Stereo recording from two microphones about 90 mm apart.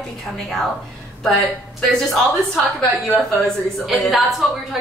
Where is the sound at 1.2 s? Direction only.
5° left (ahead or behind).